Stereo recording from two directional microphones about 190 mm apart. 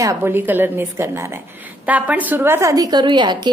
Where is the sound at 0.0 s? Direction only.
15° right (ahead or behind).